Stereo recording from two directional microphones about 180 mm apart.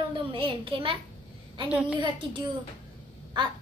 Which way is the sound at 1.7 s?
5° right (ahead or behind).